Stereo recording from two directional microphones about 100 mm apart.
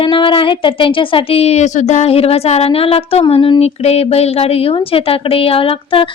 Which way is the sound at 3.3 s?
70° left (ahead or behind).